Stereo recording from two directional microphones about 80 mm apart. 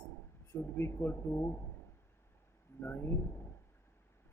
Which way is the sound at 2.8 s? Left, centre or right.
Left.